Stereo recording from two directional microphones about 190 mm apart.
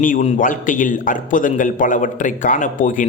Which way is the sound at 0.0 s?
40° left (ahead or behind).